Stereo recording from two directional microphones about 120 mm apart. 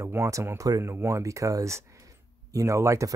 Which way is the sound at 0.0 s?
25° right (ahead or behind).